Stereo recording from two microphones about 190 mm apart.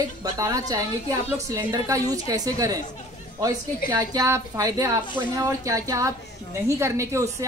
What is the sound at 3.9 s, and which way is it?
A woman's voice, 15° right (ahead or behind).